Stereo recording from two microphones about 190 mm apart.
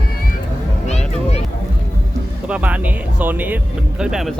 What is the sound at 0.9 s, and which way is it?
Music, 35° left (ahead or behind).